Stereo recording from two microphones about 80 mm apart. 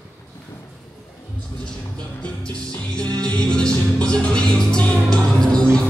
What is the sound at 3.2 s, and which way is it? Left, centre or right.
Music, centre.